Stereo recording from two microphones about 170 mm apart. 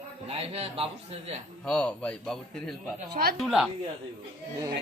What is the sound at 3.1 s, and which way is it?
Speech, 65° right (ahead or behind).